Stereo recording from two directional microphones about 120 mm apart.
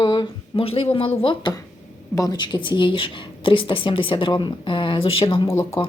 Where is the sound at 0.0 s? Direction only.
40° left (ahead or behind).